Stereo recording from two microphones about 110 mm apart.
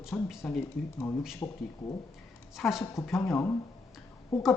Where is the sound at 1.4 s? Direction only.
25° left (ahead or behind).